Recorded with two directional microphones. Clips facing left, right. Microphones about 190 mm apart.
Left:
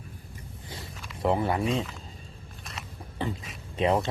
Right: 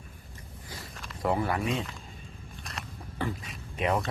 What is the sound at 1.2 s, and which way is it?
Speech, 25° left (ahead or behind).